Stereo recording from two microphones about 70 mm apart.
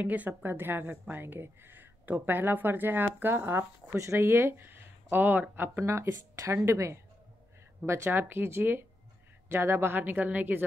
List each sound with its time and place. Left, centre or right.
0.0 s speech: right
3.9 s speech: right
5.8 s speech: right